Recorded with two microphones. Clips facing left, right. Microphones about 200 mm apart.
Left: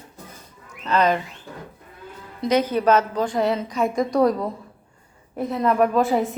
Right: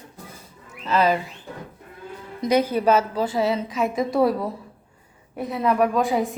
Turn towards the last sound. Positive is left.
turn(degrees=0)  # may be behind; listen again after turning